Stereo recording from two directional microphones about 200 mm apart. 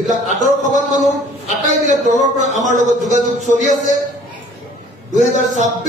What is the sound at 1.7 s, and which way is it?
A man's voice, 40° right (ahead or behind).